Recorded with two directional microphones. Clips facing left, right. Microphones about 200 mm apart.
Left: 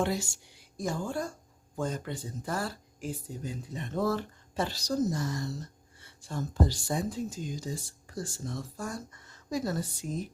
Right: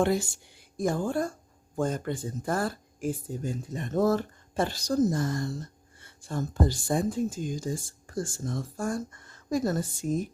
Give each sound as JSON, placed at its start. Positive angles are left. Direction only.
{"t": 0.0, "sound": "speech", "side_deg": -55}